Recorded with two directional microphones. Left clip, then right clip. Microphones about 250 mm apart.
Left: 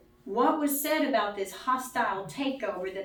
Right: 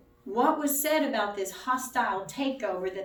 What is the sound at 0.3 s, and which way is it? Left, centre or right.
A woman's voice, right.